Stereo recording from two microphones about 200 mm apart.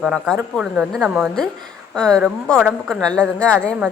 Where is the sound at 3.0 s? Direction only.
5° left (ahead or behind).